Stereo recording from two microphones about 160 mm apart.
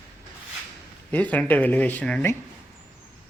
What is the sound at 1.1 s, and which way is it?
Speech, 10° left (ahead or behind).